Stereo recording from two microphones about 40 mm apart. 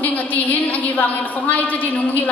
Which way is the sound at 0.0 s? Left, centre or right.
Left.